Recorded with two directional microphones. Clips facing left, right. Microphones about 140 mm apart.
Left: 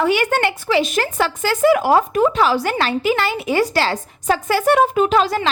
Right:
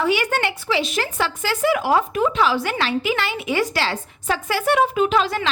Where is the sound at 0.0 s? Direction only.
50° left (ahead or behind).